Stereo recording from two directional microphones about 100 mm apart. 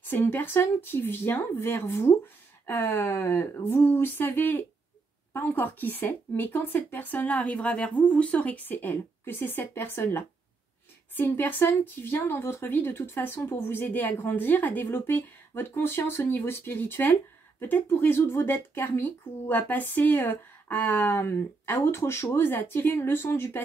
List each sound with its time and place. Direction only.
0.0 s speech: 20° left (ahead or behind)